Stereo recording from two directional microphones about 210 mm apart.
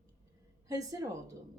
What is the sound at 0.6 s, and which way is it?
Speech, 15° right (ahead or behind).